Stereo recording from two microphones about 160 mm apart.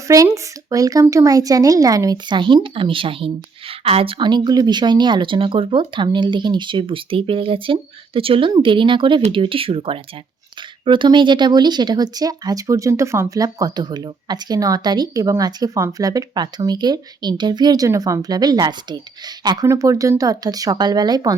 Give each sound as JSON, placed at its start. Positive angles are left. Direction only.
{"t": 0.1, "sound": "speech", "side_deg": -20}